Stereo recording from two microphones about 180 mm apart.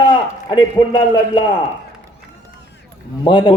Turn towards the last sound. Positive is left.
turn(degrees=25)  # may be behind; listen again after turning